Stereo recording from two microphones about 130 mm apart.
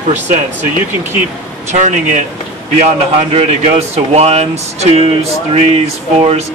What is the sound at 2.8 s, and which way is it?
A man's voice, 50° right (ahead or behind).